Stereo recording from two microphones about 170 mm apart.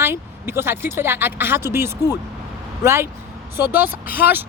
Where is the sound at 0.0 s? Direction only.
15° right (ahead or behind).